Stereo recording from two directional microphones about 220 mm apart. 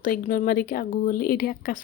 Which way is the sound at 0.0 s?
40° left (ahead or behind).